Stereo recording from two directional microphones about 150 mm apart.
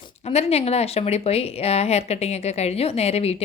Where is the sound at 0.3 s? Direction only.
45° left (ahead or behind).